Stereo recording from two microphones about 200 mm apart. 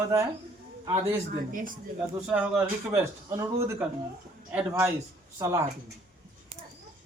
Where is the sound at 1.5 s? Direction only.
45° right (ahead or behind).